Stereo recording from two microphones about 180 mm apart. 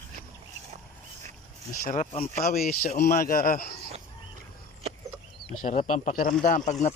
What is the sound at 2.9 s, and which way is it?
Speech, 40° left (ahead or behind).